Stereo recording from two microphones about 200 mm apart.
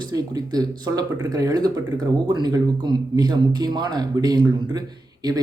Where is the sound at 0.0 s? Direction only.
20° right (ahead or behind).